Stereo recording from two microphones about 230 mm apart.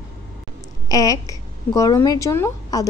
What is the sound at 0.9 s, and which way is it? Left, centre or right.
Speech, centre.